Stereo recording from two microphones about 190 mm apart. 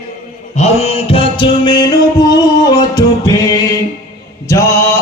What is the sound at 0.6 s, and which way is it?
Music, 30° left (ahead or behind).